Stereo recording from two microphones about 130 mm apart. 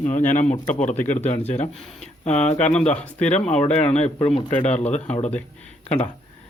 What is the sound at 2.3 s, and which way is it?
Speech, 60° left (ahead or behind).